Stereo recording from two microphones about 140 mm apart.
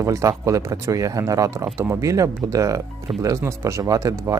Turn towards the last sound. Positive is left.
turn(degrees=-25)  # may be behind; listen again after turning